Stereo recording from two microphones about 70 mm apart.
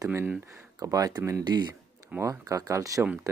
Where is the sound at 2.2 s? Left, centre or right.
Right.